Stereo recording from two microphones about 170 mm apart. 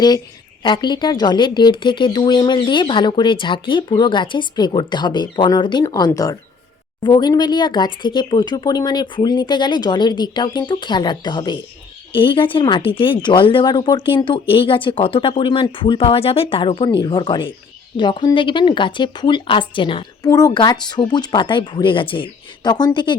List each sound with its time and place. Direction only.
0.6 s speech: 25° left (ahead or behind)